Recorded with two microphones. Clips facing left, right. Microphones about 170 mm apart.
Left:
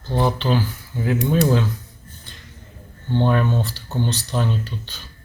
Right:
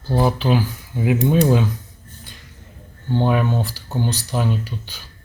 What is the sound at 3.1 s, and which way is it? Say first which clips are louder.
Speech: even; 10° right (ahead or behind).